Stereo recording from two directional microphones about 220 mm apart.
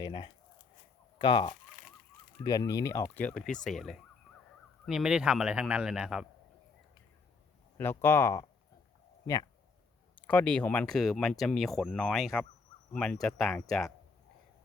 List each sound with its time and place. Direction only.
0.0 s speech: 20° left (ahead or behind)
2.4 s fowl: 15° left (ahead or behind)
4.9 s speech: 5° right (ahead or behind)
7.8 s fowl: 10° left (ahead or behind)
9.2 s speech: 15° left (ahead or behind)